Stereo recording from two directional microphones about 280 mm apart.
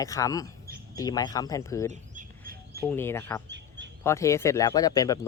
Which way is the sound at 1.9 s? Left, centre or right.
Right.